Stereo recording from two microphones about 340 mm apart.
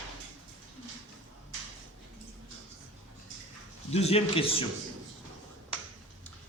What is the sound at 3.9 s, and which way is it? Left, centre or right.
Speech, centre.